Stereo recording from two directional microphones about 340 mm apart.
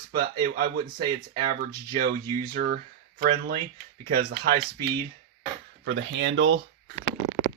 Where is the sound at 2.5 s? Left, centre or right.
Right.